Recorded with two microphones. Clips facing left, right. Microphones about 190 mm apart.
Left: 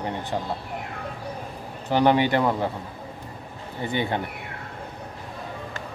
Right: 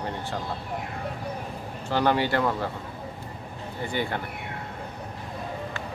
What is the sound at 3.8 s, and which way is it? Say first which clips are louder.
Speech: left 3 dB; 20° left (ahead or behind).